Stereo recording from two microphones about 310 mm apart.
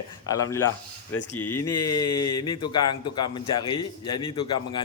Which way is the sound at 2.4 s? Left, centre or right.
Centre.